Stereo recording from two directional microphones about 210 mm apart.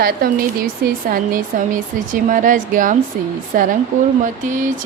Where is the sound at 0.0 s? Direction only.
45° right (ahead or behind).